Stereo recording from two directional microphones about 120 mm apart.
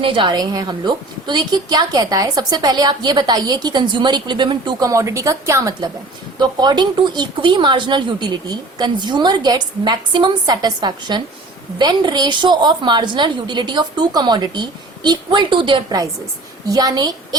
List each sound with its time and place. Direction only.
0.0 s a woman's voice: 45° right (ahead or behind)
4.9 s a woman's voice: 25° right (ahead or behind)
6.4 s a woman's voice: 35° right (ahead or behind)
16.6 s a woman's voice: 30° right (ahead or behind)